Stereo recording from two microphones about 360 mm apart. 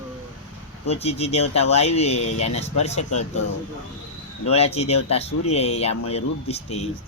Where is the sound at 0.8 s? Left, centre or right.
Centre.